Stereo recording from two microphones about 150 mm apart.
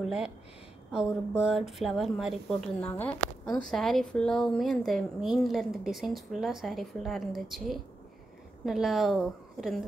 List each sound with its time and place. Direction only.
0.0 s speech: 5° right (ahead or behind)